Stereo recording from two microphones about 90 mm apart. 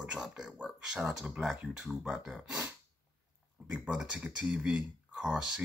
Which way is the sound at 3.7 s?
10° right (ahead or behind).